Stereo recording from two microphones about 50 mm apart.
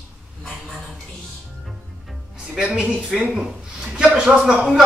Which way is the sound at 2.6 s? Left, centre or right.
Centre.